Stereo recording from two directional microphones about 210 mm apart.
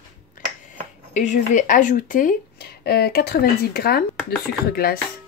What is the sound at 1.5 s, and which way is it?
Speech, 35° left (ahead or behind).